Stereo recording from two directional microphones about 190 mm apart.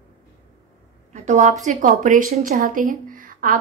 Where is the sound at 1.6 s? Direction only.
40° right (ahead or behind).